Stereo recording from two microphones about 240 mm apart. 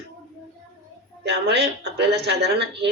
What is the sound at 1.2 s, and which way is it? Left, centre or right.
A woman's voice, right.